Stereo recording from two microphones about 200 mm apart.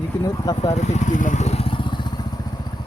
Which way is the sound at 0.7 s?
35° left (ahead or behind).